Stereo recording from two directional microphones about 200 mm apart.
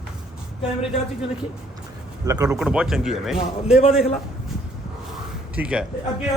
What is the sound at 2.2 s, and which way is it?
Speech, 15° right (ahead or behind).